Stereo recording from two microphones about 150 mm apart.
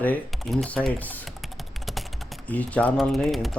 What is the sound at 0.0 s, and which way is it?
Speech, 10° left (ahead or behind).